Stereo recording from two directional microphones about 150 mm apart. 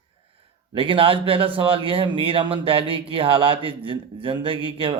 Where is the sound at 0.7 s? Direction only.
35° right (ahead or behind).